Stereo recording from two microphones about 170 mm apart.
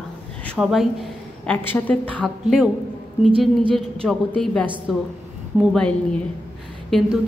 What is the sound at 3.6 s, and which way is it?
Speech, 30° right (ahead or behind).